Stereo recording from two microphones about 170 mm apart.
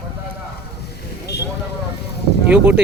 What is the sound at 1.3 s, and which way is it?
Vehicle, 75° left (ahead or behind).